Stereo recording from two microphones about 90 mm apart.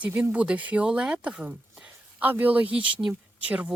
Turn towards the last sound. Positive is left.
turn(degrees=-15)  # may be behind; listen again after turning